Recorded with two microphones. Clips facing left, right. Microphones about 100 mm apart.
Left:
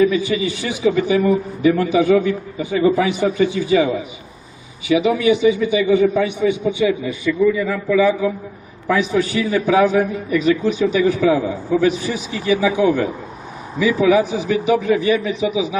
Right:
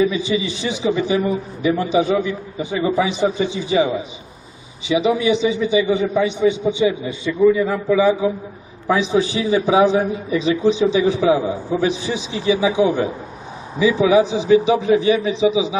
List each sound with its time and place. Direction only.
0.0 s a man's voice: 20° right (ahead or behind)